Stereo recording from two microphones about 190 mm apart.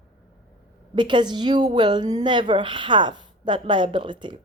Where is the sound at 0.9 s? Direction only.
25° right (ahead or behind).